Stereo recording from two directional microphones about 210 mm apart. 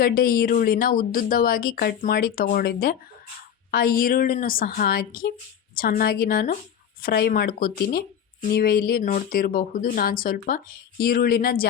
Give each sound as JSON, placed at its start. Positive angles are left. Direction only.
{"t": 0.0, "sound": "speech", "side_deg": 45}